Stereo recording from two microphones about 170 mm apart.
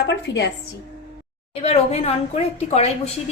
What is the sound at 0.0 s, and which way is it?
Speech, 90° left.